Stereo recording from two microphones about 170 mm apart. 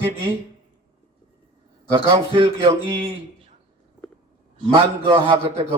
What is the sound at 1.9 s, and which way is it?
Speech, 30° right (ahead or behind).